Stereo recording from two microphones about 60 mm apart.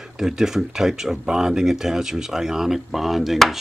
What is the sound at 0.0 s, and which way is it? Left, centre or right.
Speech, centre.